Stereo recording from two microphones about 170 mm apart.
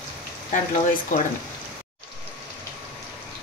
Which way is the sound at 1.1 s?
50° left (ahead or behind).